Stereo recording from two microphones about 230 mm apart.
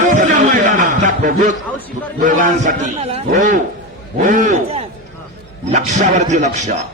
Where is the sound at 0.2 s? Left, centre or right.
Right.